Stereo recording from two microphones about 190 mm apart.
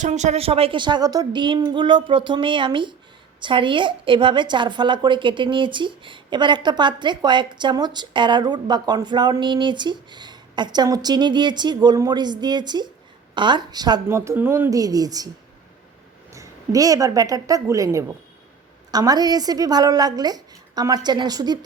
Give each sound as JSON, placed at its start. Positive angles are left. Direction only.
{"t": 0.0, "sound": "a woman's voice", "side_deg": -40}
{"t": 16.3, "sound": "a woman's voice", "side_deg": -15}